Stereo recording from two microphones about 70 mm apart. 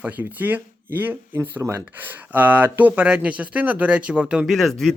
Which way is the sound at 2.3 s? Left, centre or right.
Right.